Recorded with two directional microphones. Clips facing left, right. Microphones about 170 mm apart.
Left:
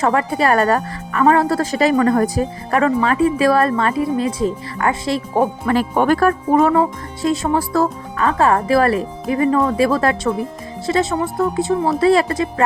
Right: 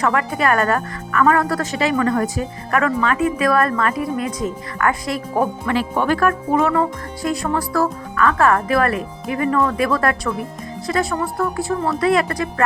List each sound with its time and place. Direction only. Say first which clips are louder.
0.0 s a woman's voice: left 2 dB; 30° left (ahead or behind)
5.7 s a woman's voice: left 4 dB; 45° left (ahead or behind); by 12.6 s 25° left (ahead or behind)